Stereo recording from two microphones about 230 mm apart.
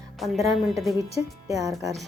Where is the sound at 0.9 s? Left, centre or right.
Centre.